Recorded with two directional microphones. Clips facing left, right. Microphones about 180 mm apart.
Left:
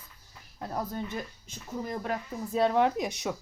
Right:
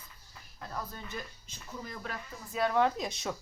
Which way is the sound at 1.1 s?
50° left (ahead or behind).